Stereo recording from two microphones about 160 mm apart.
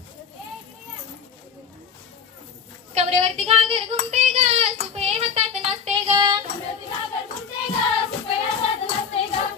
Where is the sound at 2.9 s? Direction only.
40° right (ahead or behind).